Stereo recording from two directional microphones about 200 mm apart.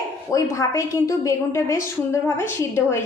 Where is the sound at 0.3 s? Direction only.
15° left (ahead or behind).